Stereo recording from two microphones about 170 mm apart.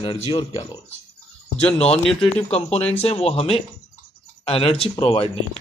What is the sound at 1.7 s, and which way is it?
Speech, 40° left (ahead or behind).